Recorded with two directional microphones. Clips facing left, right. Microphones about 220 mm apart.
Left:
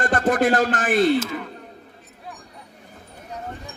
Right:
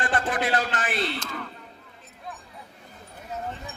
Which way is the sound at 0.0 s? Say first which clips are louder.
Left 7 dB; 45° left (ahead or behind).